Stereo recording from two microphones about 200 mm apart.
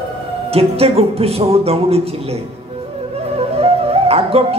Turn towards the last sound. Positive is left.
turn(degrees=-30)  # may be behind; listen again after turning